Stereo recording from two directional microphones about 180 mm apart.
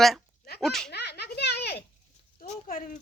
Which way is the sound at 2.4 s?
55° left (ahead or behind).